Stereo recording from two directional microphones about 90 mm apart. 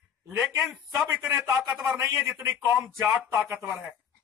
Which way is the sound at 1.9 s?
30° right (ahead or behind).